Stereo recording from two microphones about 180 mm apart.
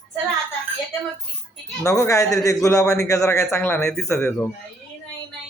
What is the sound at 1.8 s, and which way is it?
A man's voice, 15° left (ahead or behind).